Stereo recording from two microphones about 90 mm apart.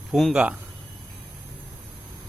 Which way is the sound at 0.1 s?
Centre (ahead or behind).